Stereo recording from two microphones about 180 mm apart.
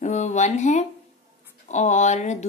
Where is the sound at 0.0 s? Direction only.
40° left (ahead or behind).